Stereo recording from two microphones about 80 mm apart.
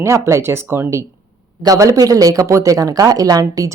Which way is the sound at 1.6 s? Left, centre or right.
Right.